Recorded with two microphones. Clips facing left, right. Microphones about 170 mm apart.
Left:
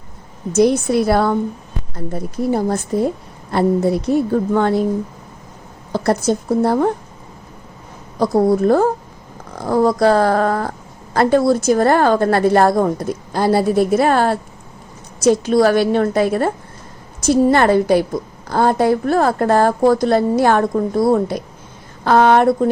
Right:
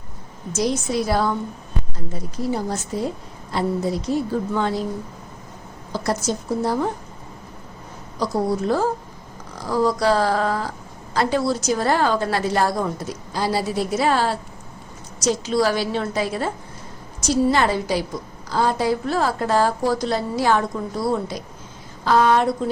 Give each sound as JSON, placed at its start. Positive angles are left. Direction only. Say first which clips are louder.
{"t": 0.5, "sound": "a woman's voice", "louder": "left 8 dB", "side_deg": 60}
{"t": 5.9, "sound": "a woman's voice", "louder": "left 7 dB", "side_deg": 60}
{"t": 8.2, "sound": "a woman's voice", "louder": "left 8 dB", "side_deg": 55}